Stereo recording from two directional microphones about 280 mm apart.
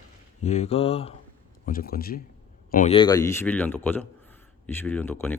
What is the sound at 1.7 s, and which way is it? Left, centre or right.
Speech, left.